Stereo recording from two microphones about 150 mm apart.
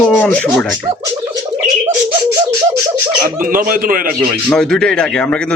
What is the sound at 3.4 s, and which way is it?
Speech, 70° right (ahead or behind).